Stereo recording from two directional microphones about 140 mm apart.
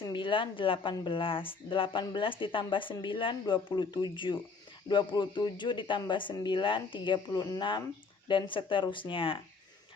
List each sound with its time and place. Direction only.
0.1 s speech: 35° left (ahead or behind)